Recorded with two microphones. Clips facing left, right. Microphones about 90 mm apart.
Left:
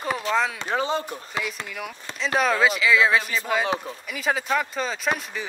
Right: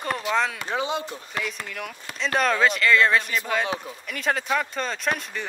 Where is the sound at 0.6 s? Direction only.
40° left (ahead or behind).